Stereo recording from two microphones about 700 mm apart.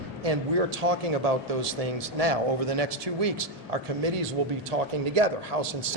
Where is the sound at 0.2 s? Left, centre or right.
Right.